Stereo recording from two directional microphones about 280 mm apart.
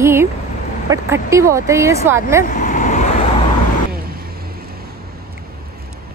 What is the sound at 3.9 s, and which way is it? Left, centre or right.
Vehicle, right.